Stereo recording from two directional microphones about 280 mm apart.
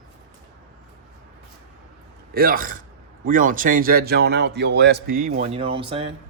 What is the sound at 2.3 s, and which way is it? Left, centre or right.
Speech, right.